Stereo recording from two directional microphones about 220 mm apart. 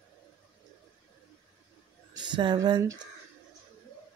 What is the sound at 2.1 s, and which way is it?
Speech, 20° right (ahead or behind).